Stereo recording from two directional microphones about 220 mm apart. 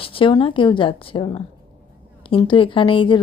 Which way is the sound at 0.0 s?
25° left (ahead or behind).